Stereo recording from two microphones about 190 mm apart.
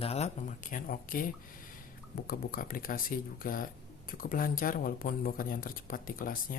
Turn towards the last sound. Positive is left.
turn(degrees=50)  # may be behind; listen again after turning